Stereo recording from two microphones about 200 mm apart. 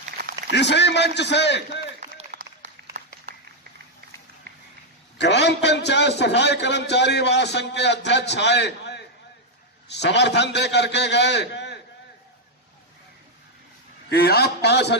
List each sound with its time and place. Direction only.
0.2 s a sound: 50° right (ahead or behind)
0.5 s a man's voice: 60° left (ahead or behind)
2.1 s applause: 40° right (ahead or behind)
5.1 s a man's voice: 60° left (ahead or behind)
14.1 s a man's voice: 50° left (ahead or behind)